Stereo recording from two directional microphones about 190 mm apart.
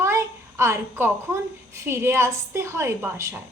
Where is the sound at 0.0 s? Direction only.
15° right (ahead or behind).